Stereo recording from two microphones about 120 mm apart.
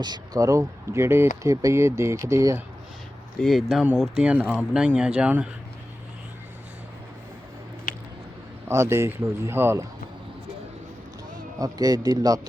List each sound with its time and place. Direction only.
0.0 s speech: 30° right (ahead or behind)
3.4 s speech: centre (ahead or behind)
8.6 s speech: 20° right (ahead or behind)
11.6 s a man's voice: 30° right (ahead or behind)